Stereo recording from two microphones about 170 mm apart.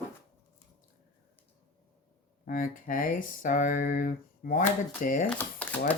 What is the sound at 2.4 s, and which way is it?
Speech, 55° left (ahead or behind).